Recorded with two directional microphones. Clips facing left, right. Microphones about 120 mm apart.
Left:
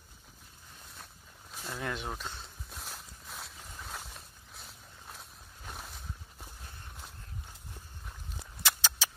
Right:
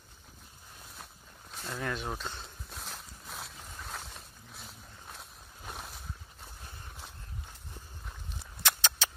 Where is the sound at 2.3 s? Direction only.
Centre (ahead or behind).